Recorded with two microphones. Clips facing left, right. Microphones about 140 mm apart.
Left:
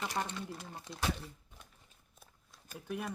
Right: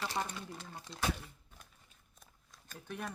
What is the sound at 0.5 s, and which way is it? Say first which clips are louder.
Speech: left 2 dB; 20° left (ahead or behind).